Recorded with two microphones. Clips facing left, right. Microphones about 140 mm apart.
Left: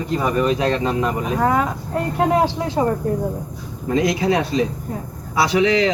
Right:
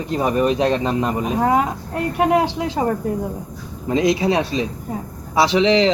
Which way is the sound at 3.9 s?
25° right (ahead or behind).